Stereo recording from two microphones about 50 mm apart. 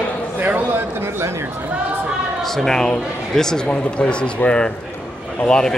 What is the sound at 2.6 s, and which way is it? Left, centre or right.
Speech, centre.